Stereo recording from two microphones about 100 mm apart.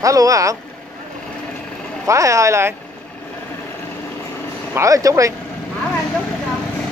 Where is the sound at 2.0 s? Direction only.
30° right (ahead or behind).